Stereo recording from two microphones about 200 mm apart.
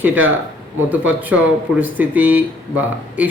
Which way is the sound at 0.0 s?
10° right (ahead or behind).